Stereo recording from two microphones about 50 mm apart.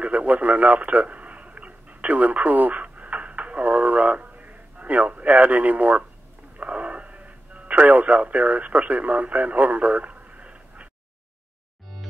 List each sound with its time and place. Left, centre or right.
0.0 s radio: right